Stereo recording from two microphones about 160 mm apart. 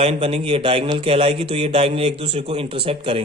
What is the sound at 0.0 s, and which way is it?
Speech, 40° right (ahead or behind).